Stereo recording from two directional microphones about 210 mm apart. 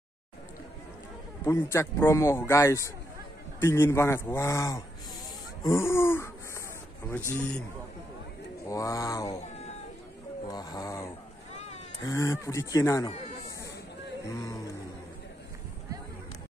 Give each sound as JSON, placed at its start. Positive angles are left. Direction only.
{"t": 1.4, "sound": "a man's voice", "side_deg": 15}
{"t": 8.6, "sound": "a man's voice", "side_deg": 15}
{"t": 10.5, "sound": "a man's voice", "side_deg": 20}
{"t": 11.5, "sound": "sheep", "side_deg": 30}
{"t": 12.0, "sound": "a man's voice", "side_deg": 15}
{"t": 14.2, "sound": "a man's voice", "side_deg": 15}